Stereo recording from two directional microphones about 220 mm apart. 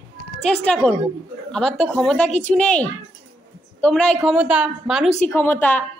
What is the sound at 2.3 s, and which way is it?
Speech, 30° left (ahead or behind).